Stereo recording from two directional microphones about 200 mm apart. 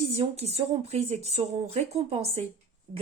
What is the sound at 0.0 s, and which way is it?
Speech, 35° right (ahead or behind).